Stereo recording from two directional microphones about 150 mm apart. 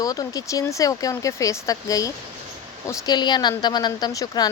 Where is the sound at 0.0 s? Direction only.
25° left (ahead or behind).